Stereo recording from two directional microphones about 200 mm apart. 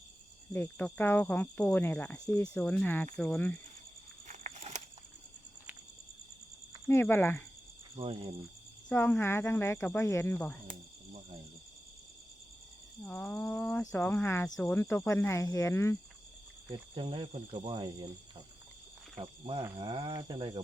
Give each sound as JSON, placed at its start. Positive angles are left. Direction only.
{"t": 0.5, "sound": "speech", "side_deg": 10}
{"t": 4.3, "sound": "a sound", "side_deg": -35}
{"t": 6.8, "sound": "speech", "side_deg": 10}
{"t": 7.9, "sound": "speech", "side_deg": -25}
{"t": 8.9, "sound": "speech", "side_deg": 5}
{"t": 10.7, "sound": "cricket", "side_deg": -30}
{"t": 13.1, "sound": "speech", "side_deg": 5}
{"t": 16.6, "sound": "speech", "side_deg": -20}